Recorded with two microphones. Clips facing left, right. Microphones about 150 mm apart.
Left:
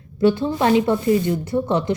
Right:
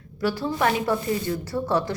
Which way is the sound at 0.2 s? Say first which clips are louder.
Left 6 dB; 25° left (ahead or behind).